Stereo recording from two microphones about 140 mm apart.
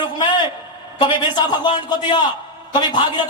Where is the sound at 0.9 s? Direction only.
30° left (ahead or behind).